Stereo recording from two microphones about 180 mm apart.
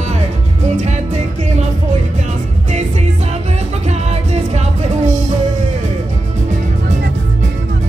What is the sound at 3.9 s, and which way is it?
Music, 40° right (ahead or behind).